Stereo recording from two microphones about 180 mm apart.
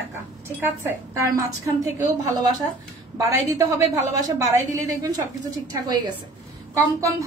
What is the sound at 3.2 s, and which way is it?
A woman's voice, 15° right (ahead or behind).